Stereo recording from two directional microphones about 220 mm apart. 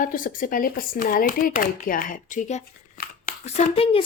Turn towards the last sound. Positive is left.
turn(degrees=25)  # may be behind; listen again after turning